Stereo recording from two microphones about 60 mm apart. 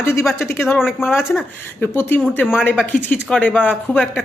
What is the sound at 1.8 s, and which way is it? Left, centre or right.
Speech, left.